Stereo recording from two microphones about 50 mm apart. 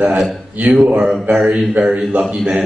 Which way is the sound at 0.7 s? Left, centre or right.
Right.